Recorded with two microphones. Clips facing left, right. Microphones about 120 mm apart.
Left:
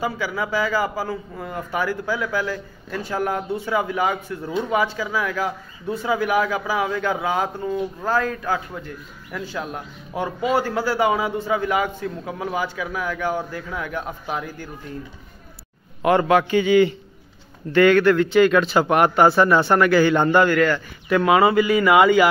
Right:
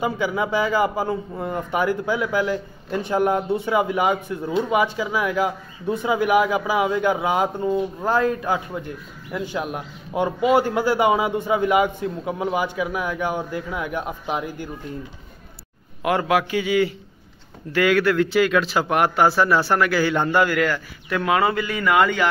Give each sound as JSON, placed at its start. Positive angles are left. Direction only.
{"t": 0.0, "sound": "speech", "side_deg": -20}
{"t": 16.0, "sound": "a man's voice", "side_deg": -5}